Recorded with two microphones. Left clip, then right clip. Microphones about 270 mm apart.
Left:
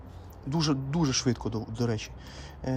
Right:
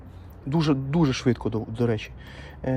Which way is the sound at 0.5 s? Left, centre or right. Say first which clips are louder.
Right 5 dB; centre.